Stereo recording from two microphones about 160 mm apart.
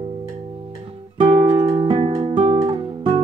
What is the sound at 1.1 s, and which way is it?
Music, 30° right (ahead or behind).